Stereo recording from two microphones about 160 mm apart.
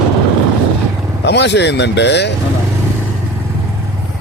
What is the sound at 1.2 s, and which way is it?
Speech, 90° left.